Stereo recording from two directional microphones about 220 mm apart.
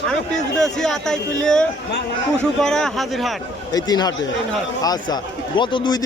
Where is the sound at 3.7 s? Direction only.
15° left (ahead or behind).